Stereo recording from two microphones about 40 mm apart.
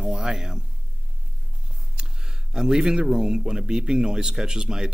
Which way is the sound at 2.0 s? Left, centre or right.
Centre.